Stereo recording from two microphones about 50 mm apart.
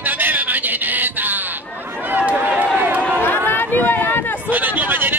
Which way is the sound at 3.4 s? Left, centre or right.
Left.